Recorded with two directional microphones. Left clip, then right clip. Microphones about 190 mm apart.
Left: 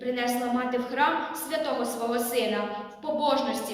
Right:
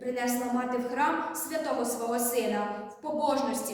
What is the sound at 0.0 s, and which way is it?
A woman's voice, 15° right (ahead or behind).